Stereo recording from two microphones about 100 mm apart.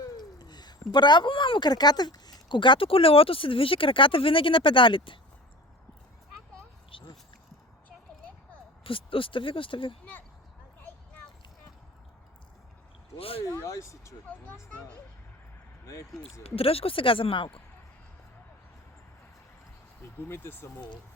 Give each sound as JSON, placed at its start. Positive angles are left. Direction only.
{"t": 0.0, "sound": "speech", "side_deg": 40}
{"t": 6.9, "sound": "a sound", "side_deg": 60}
{"t": 8.8, "sound": "speech", "side_deg": 60}
{"t": 13.1, "sound": "speech", "side_deg": 70}
{"t": 13.4, "sound": "speech", "side_deg": 30}
{"t": 14.3, "sound": "speech", "side_deg": 15}
{"t": 16.4, "sound": "speech", "side_deg": 75}
{"t": 20.1, "sound": "speech", "side_deg": 25}